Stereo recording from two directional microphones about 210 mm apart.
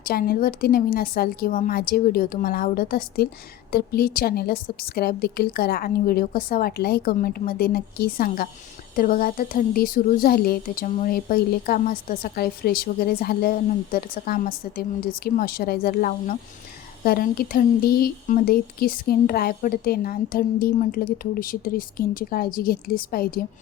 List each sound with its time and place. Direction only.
0.0 s a woman's voice: 45° left (ahead or behind)